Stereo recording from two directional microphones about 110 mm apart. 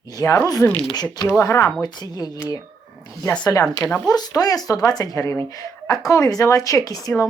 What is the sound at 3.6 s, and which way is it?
Speech, 10° left (ahead or behind).